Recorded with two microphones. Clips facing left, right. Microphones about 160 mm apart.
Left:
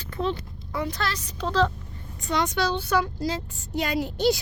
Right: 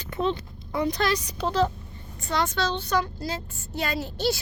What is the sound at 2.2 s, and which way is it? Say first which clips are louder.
Speech: left 1 dB; 20° left (ahead or behind).